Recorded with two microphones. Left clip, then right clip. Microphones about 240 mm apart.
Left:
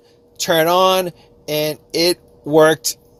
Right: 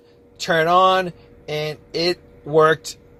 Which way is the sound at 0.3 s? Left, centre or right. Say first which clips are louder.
Left 2 dB; left.